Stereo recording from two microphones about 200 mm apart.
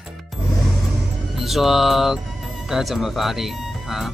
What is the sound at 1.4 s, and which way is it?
Speech, centre (ahead or behind).